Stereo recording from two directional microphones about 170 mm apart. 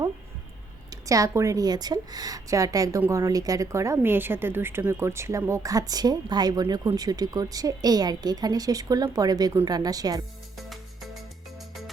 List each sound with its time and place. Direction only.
0.9 s a woman's voice: 20° right (ahead or behind)